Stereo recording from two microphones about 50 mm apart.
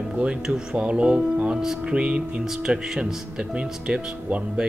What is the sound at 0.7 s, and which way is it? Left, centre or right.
Speech, right.